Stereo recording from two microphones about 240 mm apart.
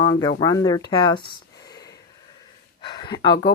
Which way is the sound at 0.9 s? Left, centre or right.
Centre.